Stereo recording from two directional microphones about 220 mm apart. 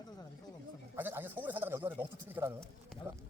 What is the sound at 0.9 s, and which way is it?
Speech, 10° right (ahead or behind).